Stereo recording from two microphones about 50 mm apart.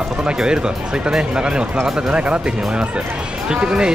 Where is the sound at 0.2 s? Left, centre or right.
Centre.